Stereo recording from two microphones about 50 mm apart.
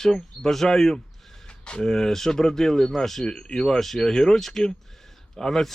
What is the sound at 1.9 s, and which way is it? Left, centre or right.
Speech, centre.